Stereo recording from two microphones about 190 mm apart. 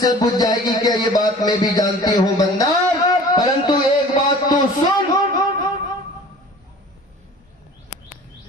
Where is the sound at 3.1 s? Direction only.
20° left (ahead or behind).